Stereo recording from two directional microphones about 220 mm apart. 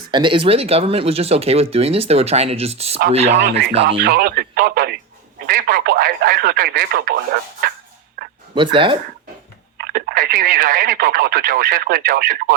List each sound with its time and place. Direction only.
0.1 s speech: 20° right (ahead or behind)
3.3 s speech: 50° right (ahead or behind)
7.6 s a sound: 40° right (ahead or behind)
8.5 s speech: 20° right (ahead or behind)
9.7 s speech: 45° right (ahead or behind)